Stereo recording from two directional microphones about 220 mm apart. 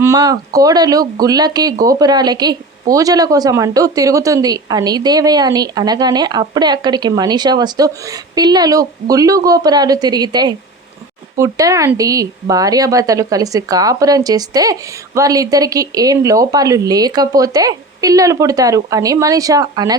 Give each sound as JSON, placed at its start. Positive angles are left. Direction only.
{"t": 0.0, "sound": "speech", "side_deg": -15}